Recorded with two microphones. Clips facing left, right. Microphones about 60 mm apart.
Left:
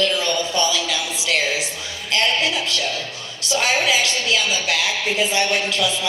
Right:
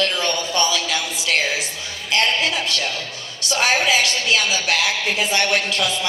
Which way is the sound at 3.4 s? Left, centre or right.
Right.